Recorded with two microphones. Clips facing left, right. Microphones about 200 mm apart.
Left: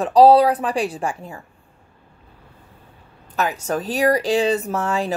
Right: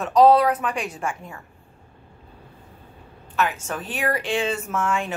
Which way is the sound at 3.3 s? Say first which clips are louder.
Left 3 dB; 40° left (ahead or behind).